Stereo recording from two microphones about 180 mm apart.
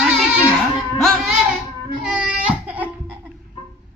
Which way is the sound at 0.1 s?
5° right (ahead or behind).